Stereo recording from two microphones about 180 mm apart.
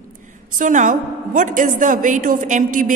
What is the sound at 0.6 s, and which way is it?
A woman's voice, 45° right (ahead or behind).